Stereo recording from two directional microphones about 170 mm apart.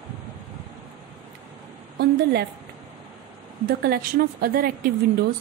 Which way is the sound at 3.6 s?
65° right (ahead or behind).